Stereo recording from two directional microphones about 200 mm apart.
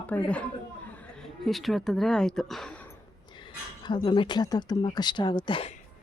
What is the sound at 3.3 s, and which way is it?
Speech, 25° left (ahead or behind).